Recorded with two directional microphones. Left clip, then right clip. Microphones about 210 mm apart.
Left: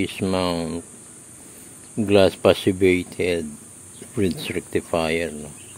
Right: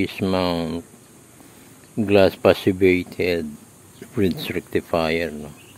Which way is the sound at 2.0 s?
5° right (ahead or behind).